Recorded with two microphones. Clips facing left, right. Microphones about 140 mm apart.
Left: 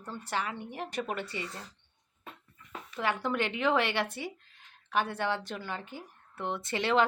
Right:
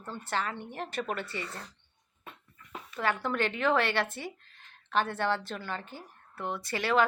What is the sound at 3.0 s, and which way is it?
Speech, 15° left (ahead or behind).